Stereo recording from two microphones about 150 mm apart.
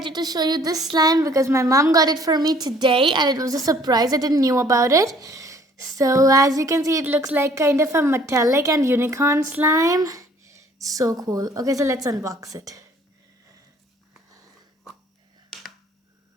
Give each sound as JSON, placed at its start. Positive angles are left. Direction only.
{"t": 0.0, "sound": "a woman's voice", "side_deg": -25}